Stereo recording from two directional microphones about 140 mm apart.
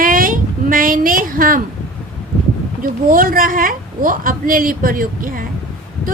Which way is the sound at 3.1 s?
90° right.